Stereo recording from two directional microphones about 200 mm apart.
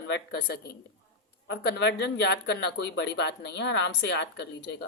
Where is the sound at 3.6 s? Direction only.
65° left (ahead or behind).